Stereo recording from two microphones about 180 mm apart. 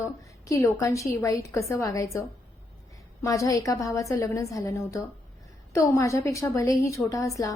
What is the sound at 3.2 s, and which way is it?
A woman's voice, 20° left (ahead or behind).